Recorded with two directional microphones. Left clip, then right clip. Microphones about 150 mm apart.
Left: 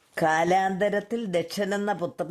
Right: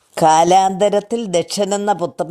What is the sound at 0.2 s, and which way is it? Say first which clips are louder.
Speech: right 11 dB; 30° right (ahead or behind).